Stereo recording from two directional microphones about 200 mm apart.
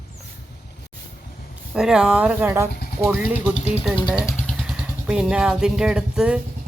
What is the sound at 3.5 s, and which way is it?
Speech, 35° left (ahead or behind).